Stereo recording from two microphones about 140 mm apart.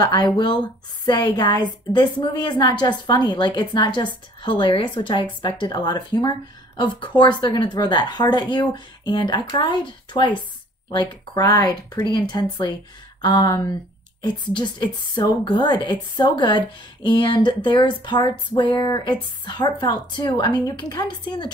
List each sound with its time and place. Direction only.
0.0 s a woman's voice: 30° left (ahead or behind)